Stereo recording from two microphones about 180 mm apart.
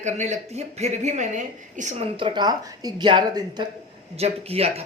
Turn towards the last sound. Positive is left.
turn(degrees=-35)  # may be behind; listen again after turning